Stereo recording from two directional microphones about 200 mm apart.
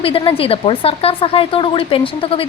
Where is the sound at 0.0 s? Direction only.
25° left (ahead or behind).